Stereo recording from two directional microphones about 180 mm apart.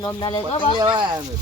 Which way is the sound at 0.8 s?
25° right (ahead or behind).